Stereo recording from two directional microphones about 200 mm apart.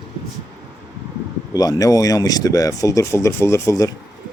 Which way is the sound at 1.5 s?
20° left (ahead or behind).